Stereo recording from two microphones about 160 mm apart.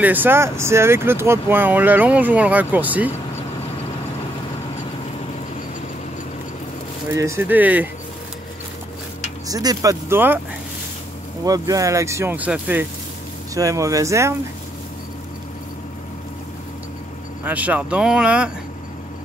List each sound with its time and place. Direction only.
0.0 s speech: 10° right (ahead or behind)
7.1 s speech: 15° right (ahead or behind)
9.5 s speech: 25° right (ahead or behind)
11.4 s speech: 20° right (ahead or behind)
13.6 s speech: 20° right (ahead or behind)
17.5 s speech: 10° right (ahead or behind)